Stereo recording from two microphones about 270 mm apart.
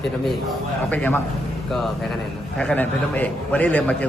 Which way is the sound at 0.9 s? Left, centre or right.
Centre.